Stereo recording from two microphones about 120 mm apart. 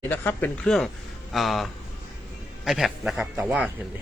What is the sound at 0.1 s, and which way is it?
A man's voice, 15° left (ahead or behind).